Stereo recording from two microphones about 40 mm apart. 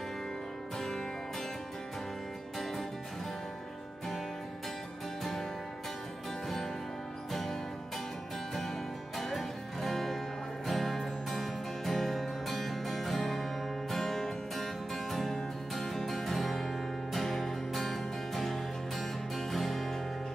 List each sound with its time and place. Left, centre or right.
0.7 s music: centre
9.2 s music: centre